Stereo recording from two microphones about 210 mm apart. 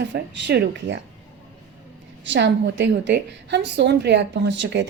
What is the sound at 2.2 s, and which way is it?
A woman's voice, 60° right (ahead or behind).